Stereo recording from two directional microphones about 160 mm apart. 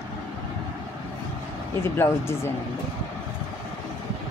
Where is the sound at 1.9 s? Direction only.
15° left (ahead or behind).